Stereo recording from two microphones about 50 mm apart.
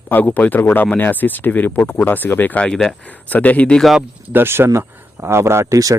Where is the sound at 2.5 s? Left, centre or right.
Left.